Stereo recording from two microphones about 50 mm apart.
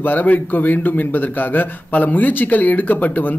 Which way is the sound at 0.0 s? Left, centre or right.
Left.